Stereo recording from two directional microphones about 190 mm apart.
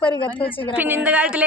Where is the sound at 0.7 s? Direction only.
10° right (ahead or behind).